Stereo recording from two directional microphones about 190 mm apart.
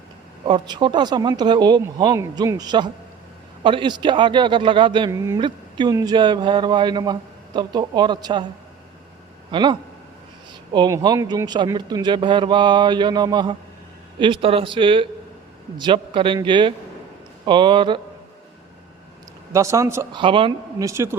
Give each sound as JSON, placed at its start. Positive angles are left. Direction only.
{"t": 0.4, "sound": "a man's voice", "side_deg": -25}
{"t": 9.5, "sound": "a man's voice", "side_deg": -25}
{"t": 19.5, "sound": "speech", "side_deg": -15}
{"t": 20.2, "sound": "a man's voice", "side_deg": -25}